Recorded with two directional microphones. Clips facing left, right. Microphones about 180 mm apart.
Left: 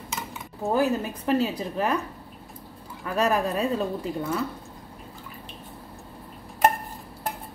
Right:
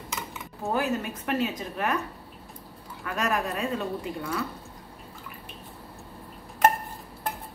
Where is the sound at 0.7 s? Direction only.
35° left (ahead or behind).